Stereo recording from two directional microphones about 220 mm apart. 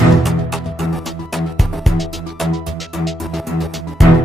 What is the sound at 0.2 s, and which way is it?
Music, centre (ahead or behind).